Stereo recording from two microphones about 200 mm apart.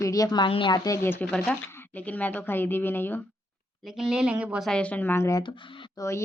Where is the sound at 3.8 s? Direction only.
Centre (ahead or behind).